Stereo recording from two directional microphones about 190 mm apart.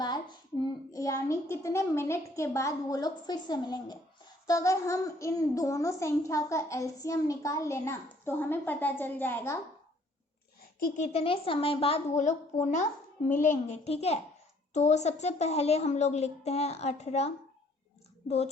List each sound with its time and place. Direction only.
0.0 s a woman's voice: 25° left (ahead or behind)
10.8 s a woman's voice: 45° left (ahead or behind)